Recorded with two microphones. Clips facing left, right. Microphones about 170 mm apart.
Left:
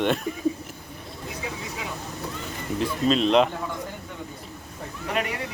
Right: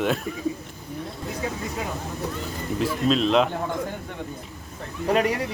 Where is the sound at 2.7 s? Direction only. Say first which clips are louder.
Even; centre (ahead or behind).